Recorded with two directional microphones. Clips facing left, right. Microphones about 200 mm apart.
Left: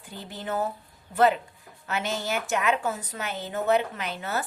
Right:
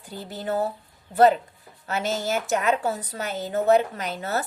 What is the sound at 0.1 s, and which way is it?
A woman's voice, 40° right (ahead or behind).